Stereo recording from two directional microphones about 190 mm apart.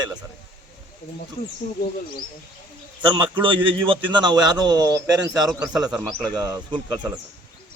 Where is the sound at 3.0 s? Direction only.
25° right (ahead or behind).